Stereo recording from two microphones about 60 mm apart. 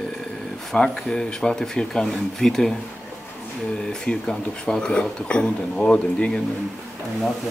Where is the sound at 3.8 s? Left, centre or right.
Centre.